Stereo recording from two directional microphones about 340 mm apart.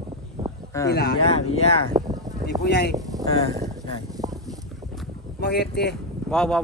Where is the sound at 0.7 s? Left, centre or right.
Centre.